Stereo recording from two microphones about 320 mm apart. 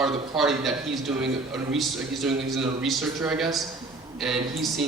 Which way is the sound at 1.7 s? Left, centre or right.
Centre.